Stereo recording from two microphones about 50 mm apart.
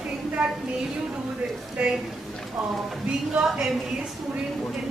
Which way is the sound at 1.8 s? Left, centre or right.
Right.